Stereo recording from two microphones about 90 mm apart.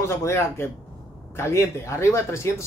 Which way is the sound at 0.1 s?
30° left (ahead or behind).